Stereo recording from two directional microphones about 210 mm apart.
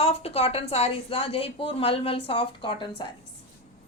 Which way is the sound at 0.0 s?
30° left (ahead or behind).